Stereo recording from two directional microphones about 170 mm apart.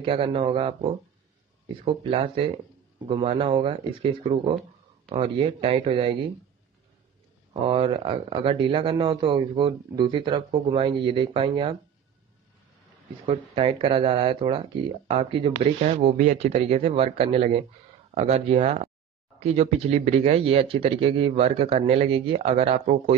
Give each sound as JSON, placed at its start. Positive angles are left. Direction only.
{"t": 0.0, "sound": "speech", "side_deg": -30}
{"t": 7.6, "sound": "speech", "side_deg": -30}
{"t": 13.2, "sound": "speech", "side_deg": -35}